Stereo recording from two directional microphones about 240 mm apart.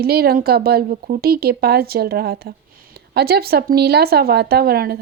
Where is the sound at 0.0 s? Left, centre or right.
Right.